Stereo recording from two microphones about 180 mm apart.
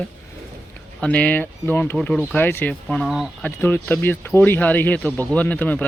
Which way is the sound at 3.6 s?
10° left (ahead or behind).